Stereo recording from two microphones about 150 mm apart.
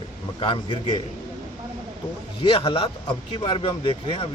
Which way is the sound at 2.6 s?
30° left (ahead or behind).